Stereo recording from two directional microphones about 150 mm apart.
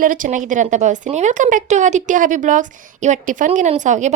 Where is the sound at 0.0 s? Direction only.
60° right (ahead or behind).